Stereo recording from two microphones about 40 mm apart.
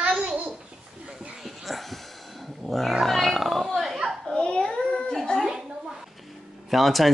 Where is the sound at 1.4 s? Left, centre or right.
Centre.